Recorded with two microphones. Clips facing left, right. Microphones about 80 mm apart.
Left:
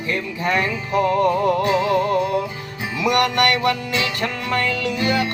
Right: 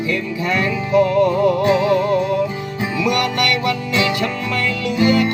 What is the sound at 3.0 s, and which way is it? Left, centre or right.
Music, left.